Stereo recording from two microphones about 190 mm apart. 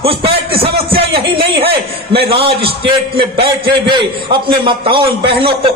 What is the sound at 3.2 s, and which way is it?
A man's voice, 25° right (ahead or behind).